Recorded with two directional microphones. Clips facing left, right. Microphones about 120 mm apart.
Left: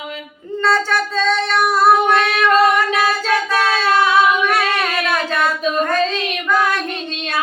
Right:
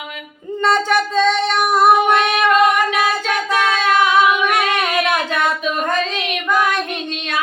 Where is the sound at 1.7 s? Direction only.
20° right (ahead or behind).